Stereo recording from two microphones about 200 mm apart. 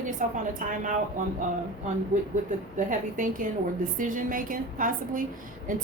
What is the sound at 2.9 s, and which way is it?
A woman's voice, 40° right (ahead or behind).